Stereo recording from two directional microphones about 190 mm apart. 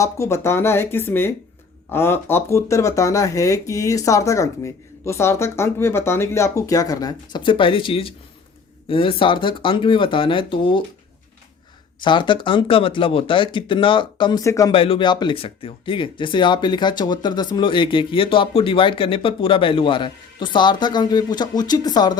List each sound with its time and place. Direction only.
0.0 s speech: 15° left (ahead or behind)
12.0 s speech: 25° left (ahead or behind)
14.7 s speech: 30° left (ahead or behind)